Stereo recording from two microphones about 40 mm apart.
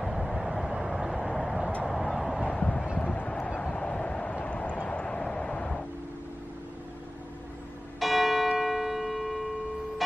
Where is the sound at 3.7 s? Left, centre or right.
Left.